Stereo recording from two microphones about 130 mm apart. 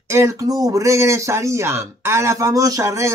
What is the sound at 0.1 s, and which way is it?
Speech, 20° right (ahead or behind).